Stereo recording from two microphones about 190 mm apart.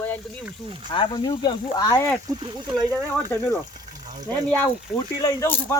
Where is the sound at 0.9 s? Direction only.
25° left (ahead or behind).